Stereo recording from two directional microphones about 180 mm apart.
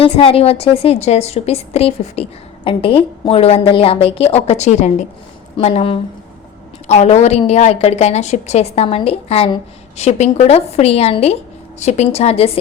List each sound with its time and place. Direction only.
0.0 s a woman's voice: 30° left (ahead or behind)